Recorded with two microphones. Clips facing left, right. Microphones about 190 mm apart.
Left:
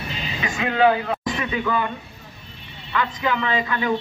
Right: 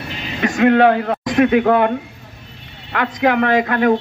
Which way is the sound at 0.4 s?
65° right (ahead or behind).